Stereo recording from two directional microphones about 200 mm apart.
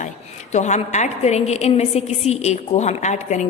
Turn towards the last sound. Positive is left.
turn(degrees=35)  # may be behind; listen again after turning